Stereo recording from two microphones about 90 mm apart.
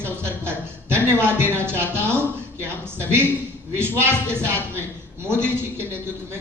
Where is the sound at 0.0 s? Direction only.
25° right (ahead or behind).